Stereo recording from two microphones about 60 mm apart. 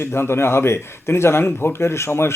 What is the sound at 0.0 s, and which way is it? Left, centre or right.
Speech, left.